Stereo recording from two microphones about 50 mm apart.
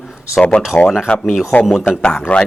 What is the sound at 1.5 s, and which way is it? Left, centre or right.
Speech, left.